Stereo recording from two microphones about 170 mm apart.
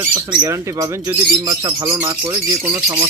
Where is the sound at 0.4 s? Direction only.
20° right (ahead or behind).